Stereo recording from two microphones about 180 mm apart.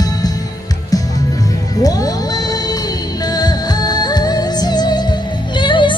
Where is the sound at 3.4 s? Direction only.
20° left (ahead or behind).